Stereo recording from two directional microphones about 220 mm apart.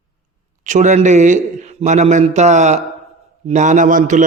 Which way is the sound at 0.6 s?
35° right (ahead or behind).